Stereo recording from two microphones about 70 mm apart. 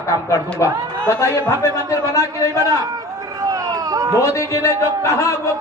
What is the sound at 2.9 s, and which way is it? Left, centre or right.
Run, right.